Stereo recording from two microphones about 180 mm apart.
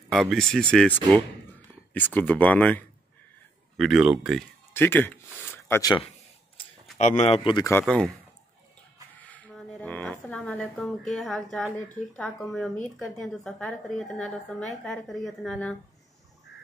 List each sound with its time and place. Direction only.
0.1 s a woman's voice: centre (ahead or behind)
4.7 s speech: 10° left (ahead or behind)
7.0 s speech: 40° left (ahead or behind)
7.8 s a woman's voice: 5° left (ahead or behind)
9.2 s a sound: 10° left (ahead or behind)
12.2 s a woman's voice: 5° left (ahead or behind)